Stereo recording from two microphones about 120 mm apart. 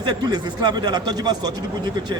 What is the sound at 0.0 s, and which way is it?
Speech, 35° right (ahead or behind).